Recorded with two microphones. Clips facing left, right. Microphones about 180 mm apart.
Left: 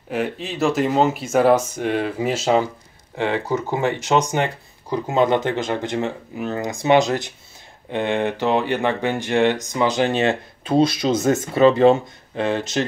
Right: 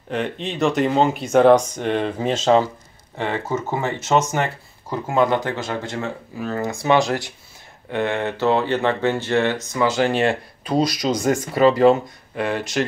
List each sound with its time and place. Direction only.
0.1 s speech: 5° left (ahead or behind)
3.8 s speech: 15° left (ahead or behind)